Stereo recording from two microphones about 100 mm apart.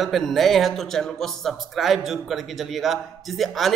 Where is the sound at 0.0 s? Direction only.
Centre (ahead or behind).